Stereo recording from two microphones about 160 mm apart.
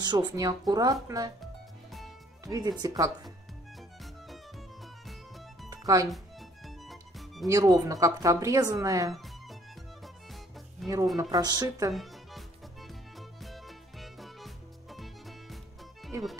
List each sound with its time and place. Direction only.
0.0 s speech: 25° right (ahead or behind)
1.4 s music: centre (ahead or behind)
2.4 s speech: 20° right (ahead or behind)
5.7 s music: 20° right (ahead or behind)
6.0 s music: centre (ahead or behind)
7.4 s speech: 20° right (ahead or behind)
9.1 s music: centre (ahead or behind)
11.1 s speech: 25° right (ahead or behind)
11.9 s music: centre (ahead or behind)